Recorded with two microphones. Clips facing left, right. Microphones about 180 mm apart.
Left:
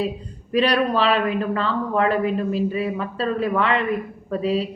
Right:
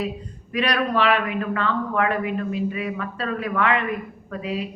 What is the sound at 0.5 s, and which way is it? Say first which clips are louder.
A man's voice: left 4 dB; 30° left (ahead or behind).